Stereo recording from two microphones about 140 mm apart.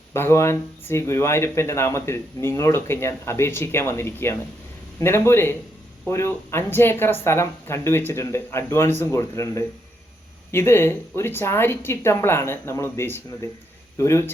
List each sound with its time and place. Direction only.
0.1 s speech: 20° left (ahead or behind)